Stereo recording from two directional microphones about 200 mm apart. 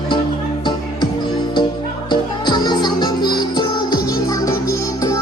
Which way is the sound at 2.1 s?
20° left (ahead or behind).